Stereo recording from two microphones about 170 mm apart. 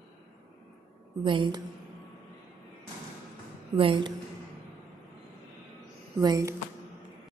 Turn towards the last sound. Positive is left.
turn(degrees=-20)  # may be behind; listen again after turning